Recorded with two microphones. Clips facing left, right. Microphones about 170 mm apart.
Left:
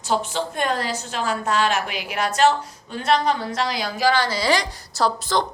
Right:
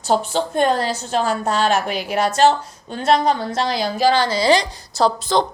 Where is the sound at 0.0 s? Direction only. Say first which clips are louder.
Right 4 dB; 35° right (ahead or behind).